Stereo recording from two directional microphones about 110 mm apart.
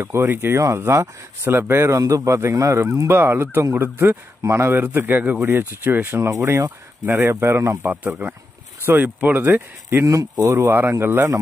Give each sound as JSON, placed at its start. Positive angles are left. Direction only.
{"t": 0.0, "sound": "speech", "side_deg": -25}